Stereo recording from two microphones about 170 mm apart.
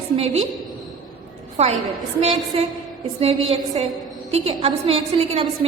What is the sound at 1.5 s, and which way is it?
A woman's voice, 40° right (ahead or behind).